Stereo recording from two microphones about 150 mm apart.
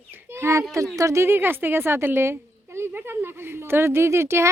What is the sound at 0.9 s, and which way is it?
A woman's voice, 20° right (ahead or behind).